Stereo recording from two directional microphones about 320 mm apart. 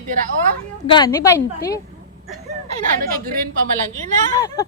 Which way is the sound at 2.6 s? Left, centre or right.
Right.